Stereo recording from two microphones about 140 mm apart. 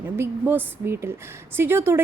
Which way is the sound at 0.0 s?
15° right (ahead or behind).